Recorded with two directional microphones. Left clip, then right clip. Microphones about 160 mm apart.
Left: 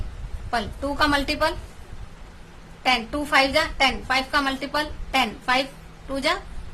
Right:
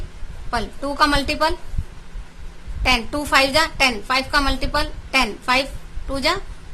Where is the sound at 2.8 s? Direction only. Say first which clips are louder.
Right 3 dB; 25° right (ahead or behind).